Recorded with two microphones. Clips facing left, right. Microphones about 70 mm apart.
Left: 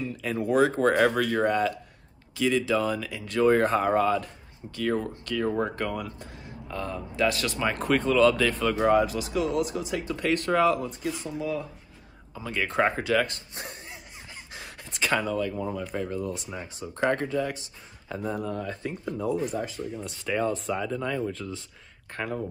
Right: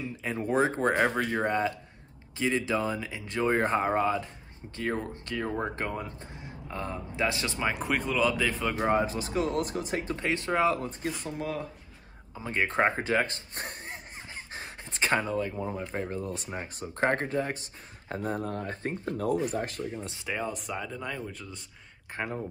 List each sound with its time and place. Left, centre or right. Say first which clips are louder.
0.0 s a sound: left 3 dB; right
0.4 s speech: left 4 dB; right
10.8 s speech: left 2 dB; right
12.4 s speech: left 1 dB; right
13.6 s a sound: right 2 dB; right
14.3 s a sound: right 1 dB; right
15.7 s speech: left 2 dB; right
19.5 s speech: left 1 dB; right
20.2 s speech: left 7 dB; centre
22.1 s speech: left 2 dB; right